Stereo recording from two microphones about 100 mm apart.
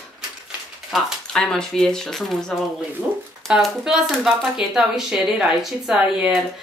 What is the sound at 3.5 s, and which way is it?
Speech, 5° right (ahead or behind).